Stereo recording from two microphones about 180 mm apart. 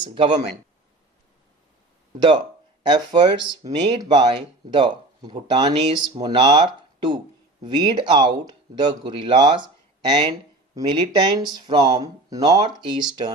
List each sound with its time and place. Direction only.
0.0 s speech: 30° right (ahead or behind)
2.1 s speech: 25° right (ahead or behind)
5.7 s speech: 35° right (ahead or behind)
7.8 s speech: 25° right (ahead or behind)